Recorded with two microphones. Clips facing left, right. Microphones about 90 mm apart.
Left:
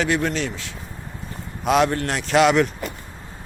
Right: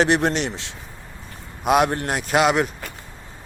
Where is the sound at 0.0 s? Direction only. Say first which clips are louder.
Right 3 dB; 25° right (ahead or behind).